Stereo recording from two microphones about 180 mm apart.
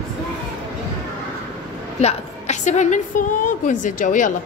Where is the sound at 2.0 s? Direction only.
40° left (ahead or behind).